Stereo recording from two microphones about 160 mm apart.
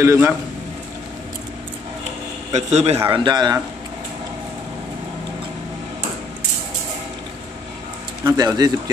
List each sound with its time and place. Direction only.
0.0 s a man's voice: 15° right (ahead or behind)
2.5 s a man's voice: 40° right (ahead or behind)
3.1 s speech: 30° right (ahead or behind)
8.2 s speech: 20° right (ahead or behind)